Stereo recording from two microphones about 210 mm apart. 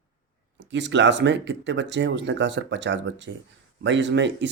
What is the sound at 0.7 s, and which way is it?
Speech, 60° right (ahead or behind).